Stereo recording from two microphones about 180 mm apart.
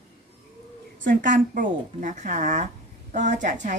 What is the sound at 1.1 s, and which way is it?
A woman's voice, 45° right (ahead or behind).